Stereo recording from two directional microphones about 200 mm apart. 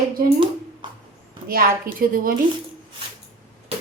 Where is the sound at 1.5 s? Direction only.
45° right (ahead or behind).